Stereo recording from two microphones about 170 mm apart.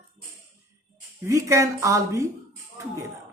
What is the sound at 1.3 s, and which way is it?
Speech, 15° right (ahead or behind).